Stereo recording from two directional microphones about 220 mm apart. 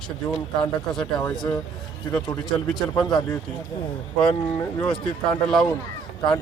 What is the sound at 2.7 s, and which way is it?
Speech, centre (ahead or behind).